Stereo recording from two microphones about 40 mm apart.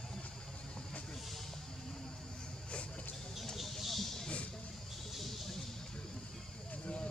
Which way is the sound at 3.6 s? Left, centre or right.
Centre.